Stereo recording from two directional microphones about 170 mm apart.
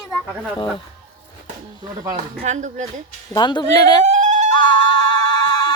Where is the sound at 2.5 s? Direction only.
45° right (ahead or behind).